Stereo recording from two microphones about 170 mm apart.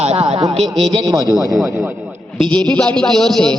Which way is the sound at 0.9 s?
20° right (ahead or behind).